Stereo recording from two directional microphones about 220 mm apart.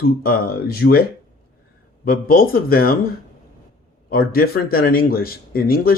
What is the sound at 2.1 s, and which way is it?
Speech, 40° left (ahead or behind).